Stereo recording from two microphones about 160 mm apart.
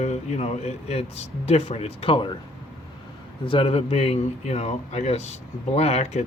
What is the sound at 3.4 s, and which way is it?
Speech, 35° left (ahead or behind).